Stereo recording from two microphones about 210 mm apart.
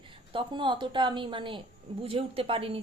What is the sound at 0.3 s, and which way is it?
Speech, 20° right (ahead or behind).